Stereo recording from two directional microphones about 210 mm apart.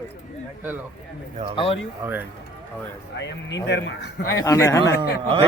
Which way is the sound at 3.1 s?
60° left (ahead or behind).